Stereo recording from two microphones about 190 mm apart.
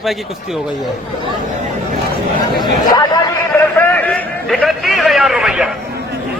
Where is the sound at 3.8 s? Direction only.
10° left (ahead or behind).